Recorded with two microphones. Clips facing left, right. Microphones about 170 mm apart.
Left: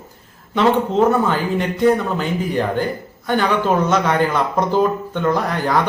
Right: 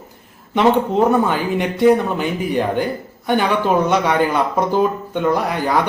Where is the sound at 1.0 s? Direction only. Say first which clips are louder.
Even; 15° right (ahead or behind).